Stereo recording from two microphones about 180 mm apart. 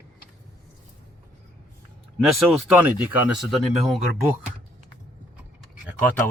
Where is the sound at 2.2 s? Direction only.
Centre (ahead or behind).